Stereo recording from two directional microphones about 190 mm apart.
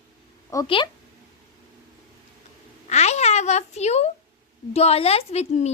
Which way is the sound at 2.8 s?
35° left (ahead or behind).